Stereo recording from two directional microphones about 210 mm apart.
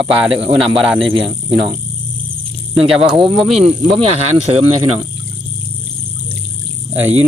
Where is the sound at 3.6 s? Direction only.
25° right (ahead or behind).